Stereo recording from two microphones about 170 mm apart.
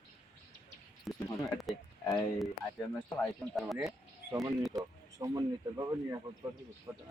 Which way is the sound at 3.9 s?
20° right (ahead or behind).